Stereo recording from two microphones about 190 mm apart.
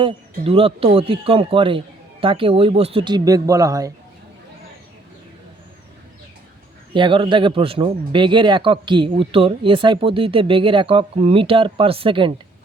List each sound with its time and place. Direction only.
0.0 s speech: 30° right (ahead or behind)
6.9 s speech: 25° right (ahead or behind)